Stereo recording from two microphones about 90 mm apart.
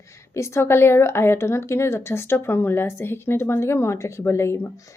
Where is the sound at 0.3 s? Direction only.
30° left (ahead or behind).